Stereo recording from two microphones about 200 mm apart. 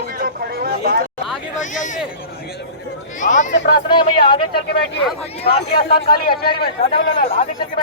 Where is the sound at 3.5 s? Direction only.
55° left (ahead or behind).